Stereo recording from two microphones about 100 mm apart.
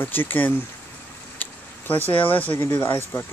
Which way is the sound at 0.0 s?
20° left (ahead or behind).